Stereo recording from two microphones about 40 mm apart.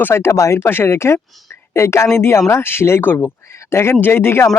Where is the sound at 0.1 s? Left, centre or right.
Left.